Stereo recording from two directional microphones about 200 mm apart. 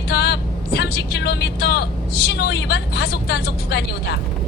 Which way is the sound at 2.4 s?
55° left (ahead or behind).